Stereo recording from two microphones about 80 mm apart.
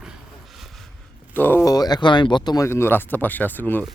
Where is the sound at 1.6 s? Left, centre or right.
Left.